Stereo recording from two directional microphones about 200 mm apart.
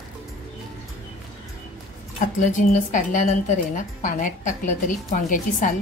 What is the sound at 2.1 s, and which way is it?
A woman's voice, 40° left (ahead or behind).